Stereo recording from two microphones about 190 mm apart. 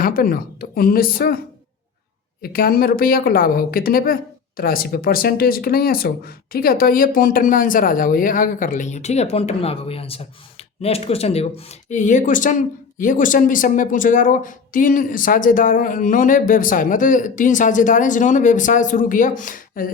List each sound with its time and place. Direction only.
0.0 s speech: 50° left (ahead or behind)
2.4 s speech: 50° left (ahead or behind)